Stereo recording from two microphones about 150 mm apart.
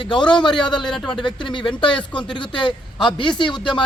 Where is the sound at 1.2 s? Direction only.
30° left (ahead or behind).